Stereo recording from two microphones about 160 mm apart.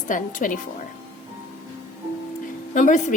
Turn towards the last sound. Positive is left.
turn(degrees=50)  # may be behind; listen again after turning